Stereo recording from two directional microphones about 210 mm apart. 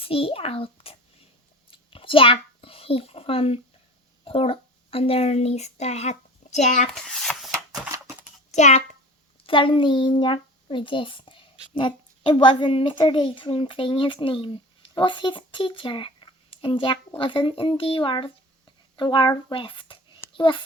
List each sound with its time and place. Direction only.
0.0 s a child's voice: 25° left (ahead or behind)
1.7 s a sound: 25° left (ahead or behind)
4.2 s speech: 25° left (ahead or behind)
6.9 s a sound: centre (ahead or behind)
7.9 s typewriter: 15° right (ahead or behind)
8.5 s a child's voice: 35° left (ahead or behind)